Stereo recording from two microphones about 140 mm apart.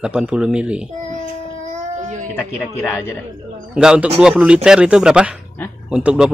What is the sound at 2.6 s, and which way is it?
Speech, 15° left (ahead or behind).